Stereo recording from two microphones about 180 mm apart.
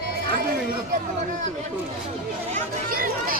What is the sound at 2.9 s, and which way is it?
Speech, 50° right (ahead or behind).